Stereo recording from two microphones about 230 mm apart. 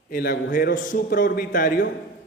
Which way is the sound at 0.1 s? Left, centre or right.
Left.